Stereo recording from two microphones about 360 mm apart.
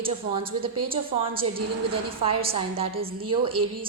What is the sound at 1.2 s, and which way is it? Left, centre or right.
A woman's voice, centre.